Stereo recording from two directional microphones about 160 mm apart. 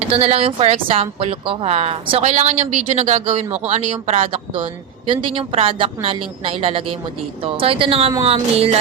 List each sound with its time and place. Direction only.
0.1 s speech: 40° right (ahead or behind)